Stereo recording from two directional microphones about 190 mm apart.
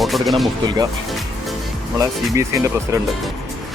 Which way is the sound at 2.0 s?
15° right (ahead or behind).